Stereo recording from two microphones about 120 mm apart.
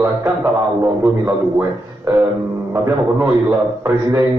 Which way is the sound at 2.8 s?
20° right (ahead or behind).